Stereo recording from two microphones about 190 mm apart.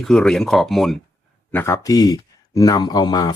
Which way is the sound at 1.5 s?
15° left (ahead or behind).